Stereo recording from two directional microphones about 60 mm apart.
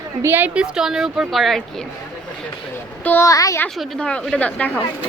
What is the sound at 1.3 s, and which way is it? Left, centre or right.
Speech, centre.